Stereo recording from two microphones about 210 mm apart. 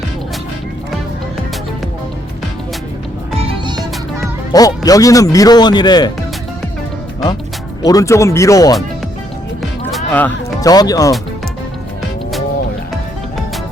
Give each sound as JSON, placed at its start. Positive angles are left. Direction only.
{"t": 4.5, "sound": "speech", "side_deg": 15}
{"t": 7.8, "sound": "speech", "side_deg": 15}
{"t": 9.6, "sound": "music", "side_deg": 5}